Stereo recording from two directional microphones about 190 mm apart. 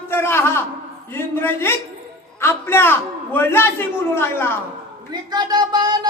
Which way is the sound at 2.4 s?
10° left (ahead or behind).